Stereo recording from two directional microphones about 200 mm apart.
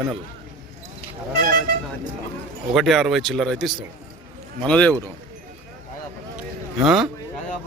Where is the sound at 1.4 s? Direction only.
50° right (ahead or behind).